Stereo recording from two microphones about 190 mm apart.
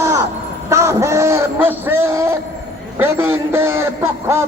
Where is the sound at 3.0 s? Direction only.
10° right (ahead or behind).